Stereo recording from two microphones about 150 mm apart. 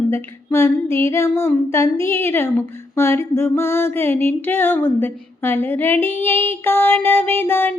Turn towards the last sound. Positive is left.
turn(degrees=15)  # may be behind; listen again after turning